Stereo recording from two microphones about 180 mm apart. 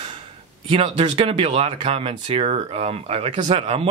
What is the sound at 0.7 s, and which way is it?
Speech, 30° right (ahead or behind).